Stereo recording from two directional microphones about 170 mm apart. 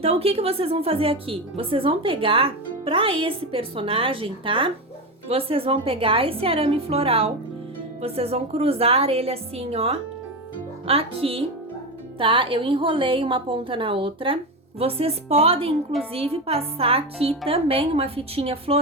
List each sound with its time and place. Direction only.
0.0 s speech: 35° right (ahead or behind)